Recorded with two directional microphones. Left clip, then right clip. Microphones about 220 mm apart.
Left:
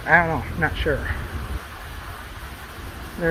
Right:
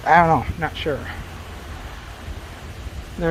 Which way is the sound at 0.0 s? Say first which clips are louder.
Right 4 dB; 30° right (ahead or behind).